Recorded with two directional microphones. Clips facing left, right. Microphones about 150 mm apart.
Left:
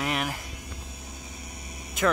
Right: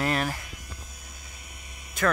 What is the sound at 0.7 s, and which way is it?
Mains hum, 30° left (ahead or behind).